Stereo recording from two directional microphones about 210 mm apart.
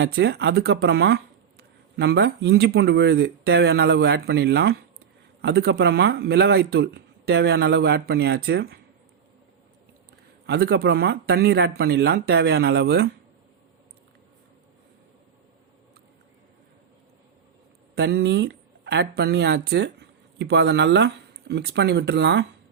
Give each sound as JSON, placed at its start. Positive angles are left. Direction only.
{"t": 0.0, "sound": "speech", "side_deg": -50}
{"t": 10.4, "sound": "speech", "side_deg": -50}
{"t": 17.9, "sound": "speech", "side_deg": -55}